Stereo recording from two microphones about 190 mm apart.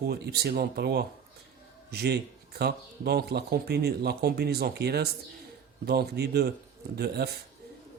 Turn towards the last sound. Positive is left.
turn(degrees=-60)  # may be behind; listen again after turning